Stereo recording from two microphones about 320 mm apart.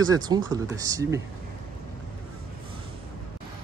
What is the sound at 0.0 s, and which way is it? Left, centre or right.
Speech, centre.